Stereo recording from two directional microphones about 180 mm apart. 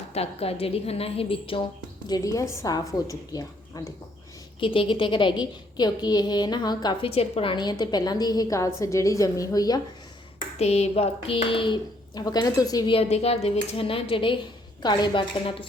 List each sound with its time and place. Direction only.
0.1 s a woman's voice: 35° left (ahead or behind)
2.0 s a woman's voice: 20° left (ahead or behind)
10.6 s a woman's voice: 35° left (ahead or behind)